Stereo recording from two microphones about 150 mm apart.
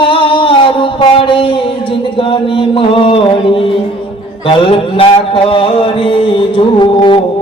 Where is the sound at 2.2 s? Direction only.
35° left (ahead or behind).